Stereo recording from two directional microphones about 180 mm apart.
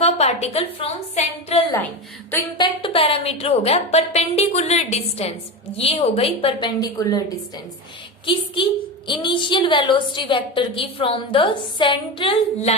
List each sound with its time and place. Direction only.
0.0 s a woman's voice: 35° left (ahead or behind)
2.6 s a woman's voice: 30° left (ahead or behind)
8.6 s a woman's voice: 30° left (ahead or behind)